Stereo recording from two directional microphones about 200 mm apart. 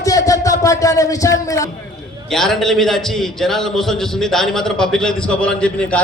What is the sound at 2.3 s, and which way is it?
A man's voice, centre (ahead or behind).